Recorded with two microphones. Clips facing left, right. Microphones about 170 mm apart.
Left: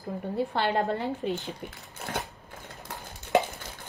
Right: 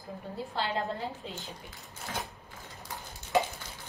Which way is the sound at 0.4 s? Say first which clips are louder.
Left 6 dB; 65° left (ahead or behind).